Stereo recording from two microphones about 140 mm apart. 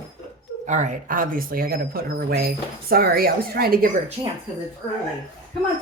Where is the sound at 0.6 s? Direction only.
60° right (ahead or behind); by 3.9 s 90° right.